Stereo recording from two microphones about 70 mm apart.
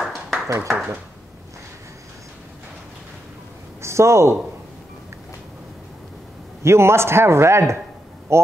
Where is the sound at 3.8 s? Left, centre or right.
Right.